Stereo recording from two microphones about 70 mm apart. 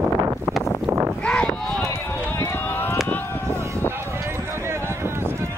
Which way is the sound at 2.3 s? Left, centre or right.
Left.